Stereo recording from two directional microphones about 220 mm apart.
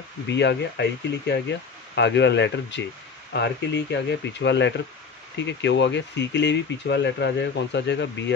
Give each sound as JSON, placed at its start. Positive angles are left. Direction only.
{"t": 0.3, "sound": "speech", "side_deg": 50}